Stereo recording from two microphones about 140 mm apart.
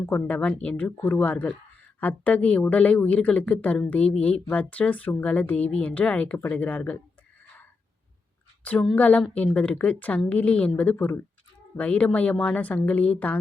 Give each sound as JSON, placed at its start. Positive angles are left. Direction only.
{"t": 0.1, "sound": "speech", "side_deg": 10}
{"t": 8.6, "sound": "speech", "side_deg": 5}